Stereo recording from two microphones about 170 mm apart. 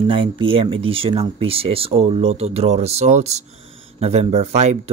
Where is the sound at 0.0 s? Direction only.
30° right (ahead or behind).